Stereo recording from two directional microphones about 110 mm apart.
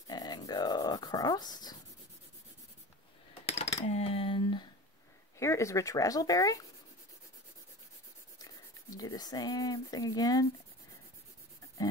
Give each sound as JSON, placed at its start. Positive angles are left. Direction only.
{"t": 0.1, "sound": "dog", "side_deg": 40}
{"t": 3.8, "sound": "a sound", "side_deg": 75}
{"t": 5.4, "sound": "speech", "side_deg": 25}
{"t": 8.4, "sound": "speech", "side_deg": 35}